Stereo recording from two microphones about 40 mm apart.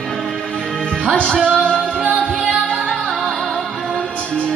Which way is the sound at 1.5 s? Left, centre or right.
Left.